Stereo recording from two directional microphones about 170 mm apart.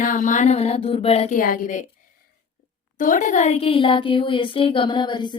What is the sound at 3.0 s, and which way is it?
Speech, 50° left (ahead or behind).